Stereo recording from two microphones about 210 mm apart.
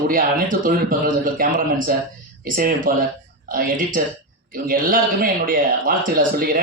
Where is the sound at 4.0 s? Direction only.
45° right (ahead or behind).